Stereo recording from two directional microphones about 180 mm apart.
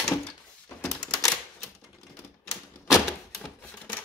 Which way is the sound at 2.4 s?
15° left (ahead or behind).